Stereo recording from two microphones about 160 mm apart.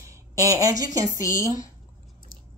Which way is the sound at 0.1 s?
20° right (ahead or behind).